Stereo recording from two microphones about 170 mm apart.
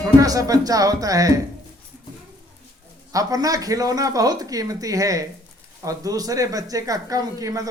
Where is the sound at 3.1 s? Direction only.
20° right (ahead or behind).